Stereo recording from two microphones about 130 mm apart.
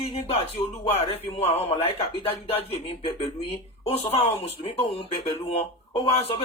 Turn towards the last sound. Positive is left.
turn(degrees=45)  # may be behind; listen again after turning